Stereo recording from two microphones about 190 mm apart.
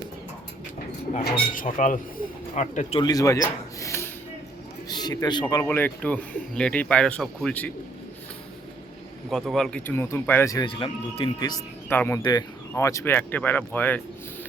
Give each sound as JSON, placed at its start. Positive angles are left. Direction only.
{"t": 1.1, "sound": "speech", "side_deg": 45}
{"t": 3.0, "sound": "a man's voice", "side_deg": 20}
{"t": 9.3, "sound": "a man's voice", "side_deg": 0}
{"t": 11.9, "sound": "a man's voice", "side_deg": 10}